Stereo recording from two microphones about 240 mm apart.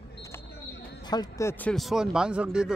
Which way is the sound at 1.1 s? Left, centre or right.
Centre.